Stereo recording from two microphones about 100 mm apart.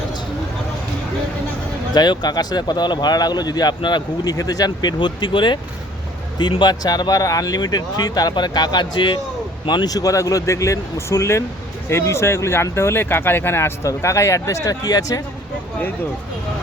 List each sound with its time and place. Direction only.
1.9 s speech: 45° left (ahead or behind)